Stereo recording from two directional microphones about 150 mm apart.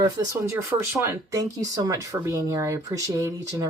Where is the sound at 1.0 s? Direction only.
20° right (ahead or behind).